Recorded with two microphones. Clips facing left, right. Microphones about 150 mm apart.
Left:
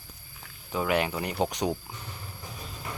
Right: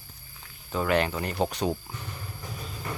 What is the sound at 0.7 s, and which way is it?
Speech, 10° left (ahead or behind).